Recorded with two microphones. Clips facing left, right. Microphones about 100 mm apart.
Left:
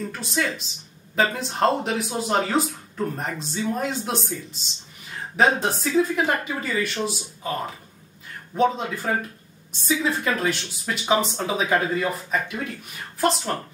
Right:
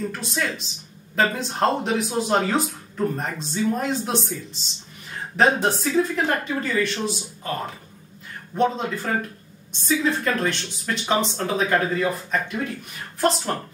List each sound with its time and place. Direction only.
0.1 s speech: centre (ahead or behind)
5.3 s speech: centre (ahead or behind)